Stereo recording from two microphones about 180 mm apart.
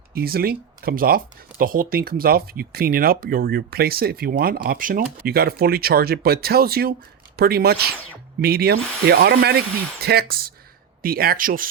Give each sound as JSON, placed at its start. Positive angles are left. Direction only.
{"t": 0.1, "sound": "speech", "side_deg": -60}